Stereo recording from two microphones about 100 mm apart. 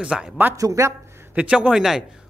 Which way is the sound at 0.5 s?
35° right (ahead or behind).